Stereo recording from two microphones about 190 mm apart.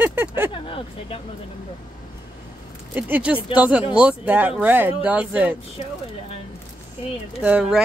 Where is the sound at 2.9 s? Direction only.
10° right (ahead or behind).